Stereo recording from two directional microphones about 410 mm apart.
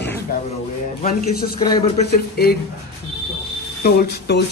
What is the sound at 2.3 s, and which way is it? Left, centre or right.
Speech, left.